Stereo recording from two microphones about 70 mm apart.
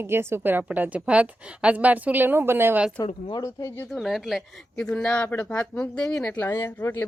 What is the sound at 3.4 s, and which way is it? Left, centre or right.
Speech, left.